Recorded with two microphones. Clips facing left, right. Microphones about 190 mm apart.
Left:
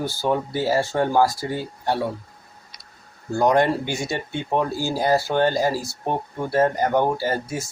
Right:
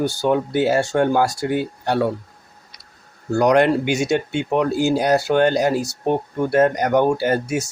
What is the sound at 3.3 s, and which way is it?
Speech, 75° right (ahead or behind).